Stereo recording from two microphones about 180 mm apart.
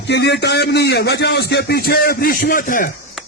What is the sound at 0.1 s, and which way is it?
A man's voice, 70° left (ahead or behind).